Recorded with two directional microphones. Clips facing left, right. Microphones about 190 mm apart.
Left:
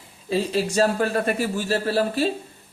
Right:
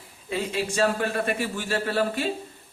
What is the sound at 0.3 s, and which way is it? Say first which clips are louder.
A man's voice: left 5 dB; 35° left (ahead or behind).